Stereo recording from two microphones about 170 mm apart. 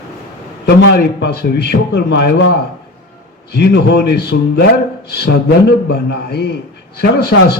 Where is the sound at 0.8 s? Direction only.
85° left.